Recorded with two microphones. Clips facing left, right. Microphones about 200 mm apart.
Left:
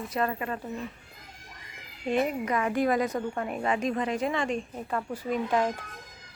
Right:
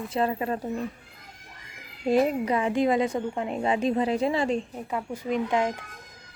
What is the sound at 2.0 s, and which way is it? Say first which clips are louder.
A woman's voice: right 4 dB; 35° right (ahead or behind).